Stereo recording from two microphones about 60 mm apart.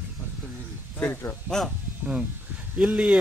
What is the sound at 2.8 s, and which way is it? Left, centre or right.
Speech, centre.